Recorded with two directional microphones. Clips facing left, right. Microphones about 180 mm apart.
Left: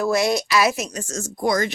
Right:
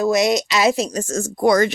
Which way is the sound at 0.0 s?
20° right (ahead or behind).